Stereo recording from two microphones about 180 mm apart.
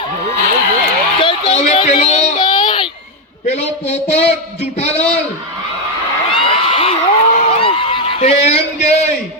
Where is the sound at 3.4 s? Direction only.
35° left (ahead or behind).